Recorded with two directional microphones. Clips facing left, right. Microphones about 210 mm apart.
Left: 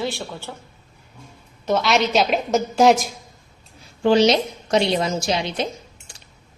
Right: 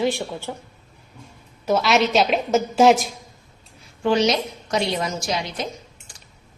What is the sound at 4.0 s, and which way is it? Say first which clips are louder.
A woman's voice: left 4 dB; 30° left (ahead or behind).